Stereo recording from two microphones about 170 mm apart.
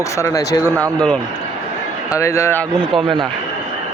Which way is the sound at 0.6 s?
20° right (ahead or behind).